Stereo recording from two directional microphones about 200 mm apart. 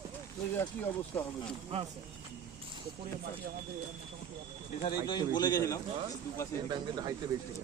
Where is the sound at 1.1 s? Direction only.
10° left (ahead or behind).